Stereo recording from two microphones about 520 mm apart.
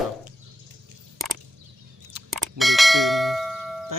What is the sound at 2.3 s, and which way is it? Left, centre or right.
Clang, centre.